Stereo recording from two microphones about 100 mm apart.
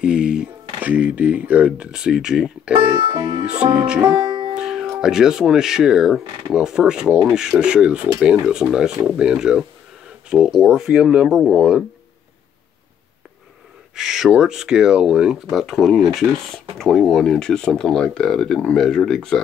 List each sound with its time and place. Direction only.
0.0 s speech: 10° right (ahead or behind)
2.7 s speech: 50° right (ahead or behind)
3.8 s speech: 10° right (ahead or behind)
4.1 s music: 55° right (ahead or behind)
4.6 s music: 5° right (ahead or behind)
5.0 s speech: 5° right (ahead or behind)
13.9 s speech: 5° right (ahead or behind)